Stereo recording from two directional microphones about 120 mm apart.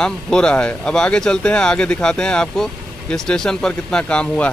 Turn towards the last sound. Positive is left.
turn(degrees=10)  # may be behind; listen again after turning